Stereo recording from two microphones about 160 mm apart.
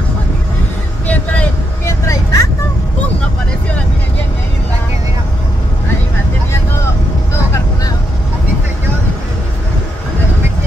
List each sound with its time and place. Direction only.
1.9 s vehicle: 20° left (ahead or behind)